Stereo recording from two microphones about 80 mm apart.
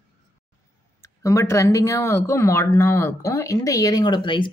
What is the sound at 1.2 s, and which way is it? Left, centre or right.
Speech, left.